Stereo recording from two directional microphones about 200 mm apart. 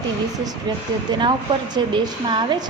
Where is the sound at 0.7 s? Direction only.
20° right (ahead or behind).